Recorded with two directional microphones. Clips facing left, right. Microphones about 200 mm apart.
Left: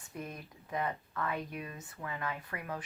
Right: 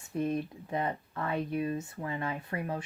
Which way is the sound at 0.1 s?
30° right (ahead or behind).